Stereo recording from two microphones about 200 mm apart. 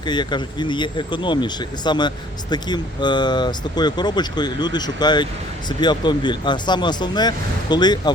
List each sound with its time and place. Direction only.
0.0 s speech: 20° left (ahead or behind)